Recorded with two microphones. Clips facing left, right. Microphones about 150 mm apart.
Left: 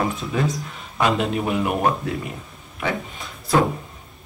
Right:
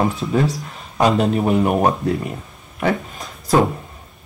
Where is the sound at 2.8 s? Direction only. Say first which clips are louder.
Right 6 dB; 45° right (ahead or behind).